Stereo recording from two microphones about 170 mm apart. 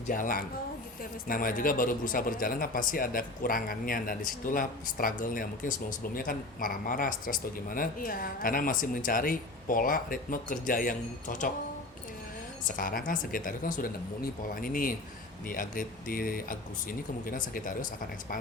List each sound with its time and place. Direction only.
0.1 s speech: 55° left (ahead or behind)
12.6 s speech: 55° left (ahead or behind)